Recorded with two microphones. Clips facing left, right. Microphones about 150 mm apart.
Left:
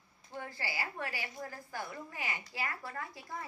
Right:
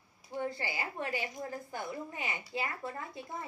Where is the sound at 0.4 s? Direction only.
20° right (ahead or behind).